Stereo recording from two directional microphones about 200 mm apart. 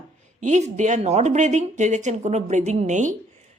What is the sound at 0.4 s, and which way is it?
Speech, 35° right (ahead or behind).